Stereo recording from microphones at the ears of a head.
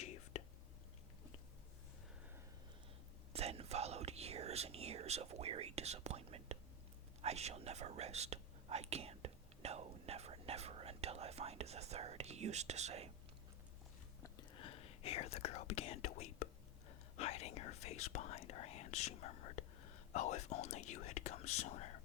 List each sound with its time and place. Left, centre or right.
3.3 s whispering: right
14.2 s whispering: left
17.2 s speech: left